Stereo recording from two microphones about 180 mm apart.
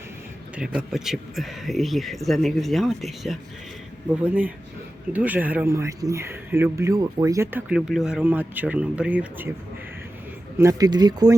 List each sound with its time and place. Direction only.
0.5 s speech: 5° right (ahead or behind)
7.7 s speech: centre (ahead or behind)
10.6 s speech: 20° right (ahead or behind)